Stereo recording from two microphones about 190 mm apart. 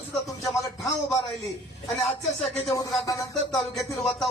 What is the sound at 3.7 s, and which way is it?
Speech, centre (ahead or behind).